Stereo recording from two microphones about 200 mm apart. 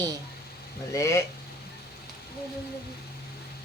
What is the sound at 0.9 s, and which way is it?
Speech, 15° left (ahead or behind).